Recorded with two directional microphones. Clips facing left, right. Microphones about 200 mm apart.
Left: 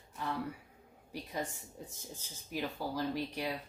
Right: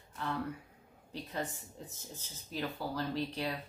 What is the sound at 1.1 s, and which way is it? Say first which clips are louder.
Speech: even; 10° left (ahead or behind).